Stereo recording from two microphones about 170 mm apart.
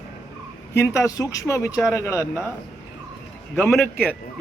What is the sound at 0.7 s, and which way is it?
Speech, 15° left (ahead or behind).